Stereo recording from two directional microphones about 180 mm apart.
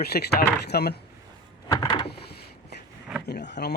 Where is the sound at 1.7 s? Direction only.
20° left (ahead or behind).